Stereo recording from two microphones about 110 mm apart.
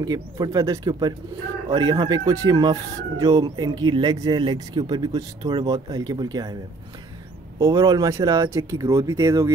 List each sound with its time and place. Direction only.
0.0 s speech: 35° right (ahead or behind)
7.5 s speech: 35° right (ahead or behind)